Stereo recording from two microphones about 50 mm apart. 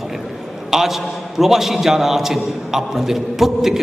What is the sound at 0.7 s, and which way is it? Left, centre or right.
A man's voice, centre.